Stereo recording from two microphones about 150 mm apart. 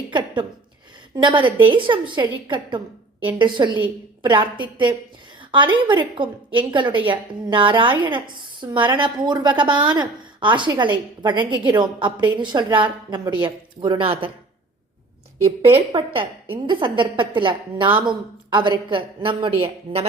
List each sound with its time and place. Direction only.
0.1 s a sound: 30° right (ahead or behind)
1.1 s a woman's voice: 30° right (ahead or behind)
15.4 s a woman's voice: 40° right (ahead or behind)